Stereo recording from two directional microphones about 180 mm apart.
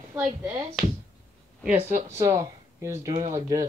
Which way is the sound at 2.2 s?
15° right (ahead or behind).